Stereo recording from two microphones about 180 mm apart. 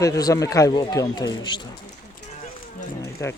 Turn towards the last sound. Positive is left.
turn(degrees=15)  # may be behind; listen again after turning